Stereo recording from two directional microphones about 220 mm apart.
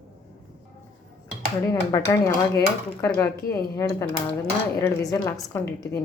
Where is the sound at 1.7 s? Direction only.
15° left (ahead or behind).